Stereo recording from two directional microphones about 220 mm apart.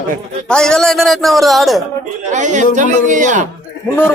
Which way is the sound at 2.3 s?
35° right (ahead or behind).